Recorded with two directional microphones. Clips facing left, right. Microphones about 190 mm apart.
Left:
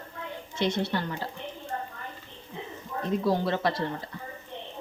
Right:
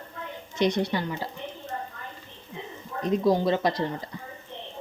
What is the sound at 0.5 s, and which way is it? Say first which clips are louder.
Speech: right 3 dB; 15° right (ahead or behind).